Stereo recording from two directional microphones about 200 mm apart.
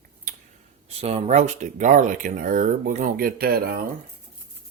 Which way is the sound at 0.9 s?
35° right (ahead or behind).